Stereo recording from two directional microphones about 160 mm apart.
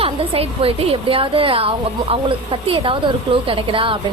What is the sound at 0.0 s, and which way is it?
A woman's voice, 35° right (ahead or behind).